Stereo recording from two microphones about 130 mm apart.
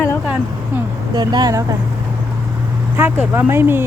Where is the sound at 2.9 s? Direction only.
15° right (ahead or behind).